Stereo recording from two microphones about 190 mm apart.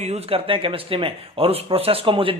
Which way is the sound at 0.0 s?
35° right (ahead or behind).